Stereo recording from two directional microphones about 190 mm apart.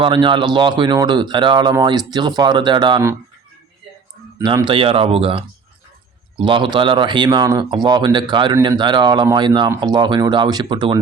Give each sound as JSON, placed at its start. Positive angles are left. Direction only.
{"t": 0.0, "sound": "speech", "side_deg": -25}
{"t": 4.4, "sound": "speech", "side_deg": -20}